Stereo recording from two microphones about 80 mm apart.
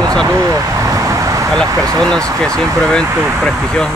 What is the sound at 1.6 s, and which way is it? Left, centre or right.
Speech, right.